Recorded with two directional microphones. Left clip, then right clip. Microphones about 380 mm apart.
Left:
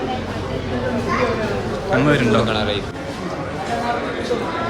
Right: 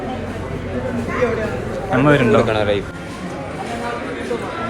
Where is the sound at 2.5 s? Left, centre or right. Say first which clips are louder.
Right 3 dB; centre.